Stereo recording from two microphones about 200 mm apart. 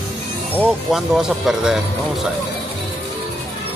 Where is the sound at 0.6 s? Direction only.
Centre (ahead or behind).